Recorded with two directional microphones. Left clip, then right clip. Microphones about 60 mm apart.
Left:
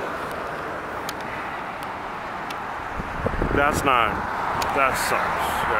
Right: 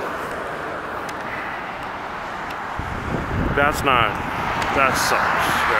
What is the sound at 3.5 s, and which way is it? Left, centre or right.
Speech, centre.